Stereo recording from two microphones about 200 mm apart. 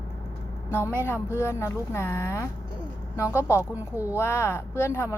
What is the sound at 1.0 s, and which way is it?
Speech, 15° left (ahead or behind).